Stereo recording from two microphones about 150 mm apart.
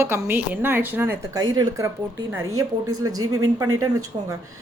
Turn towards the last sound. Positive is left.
turn(degrees=-25)  # may be behind; listen again after turning